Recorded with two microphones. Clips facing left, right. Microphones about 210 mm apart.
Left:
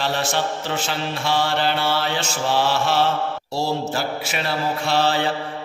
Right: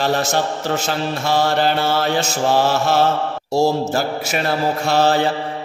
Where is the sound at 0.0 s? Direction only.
45° right (ahead or behind).